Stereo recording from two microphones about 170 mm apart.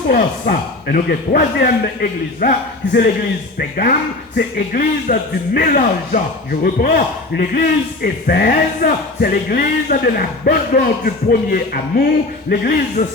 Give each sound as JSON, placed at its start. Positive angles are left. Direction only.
{"t": 0.1, "sound": "speech", "side_deg": 60}